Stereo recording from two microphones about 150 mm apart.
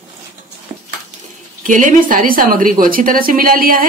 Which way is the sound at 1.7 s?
60° right (ahead or behind).